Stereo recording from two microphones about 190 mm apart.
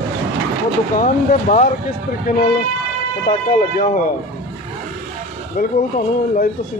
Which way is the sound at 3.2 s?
45° left (ahead or behind).